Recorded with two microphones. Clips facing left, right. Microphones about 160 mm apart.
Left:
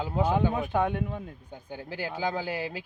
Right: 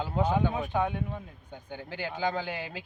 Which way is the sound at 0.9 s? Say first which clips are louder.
Left 3 dB; 50° left (ahead or behind).